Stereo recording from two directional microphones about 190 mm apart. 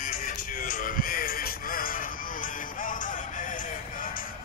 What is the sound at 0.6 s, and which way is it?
Music, 45° left (ahead or behind).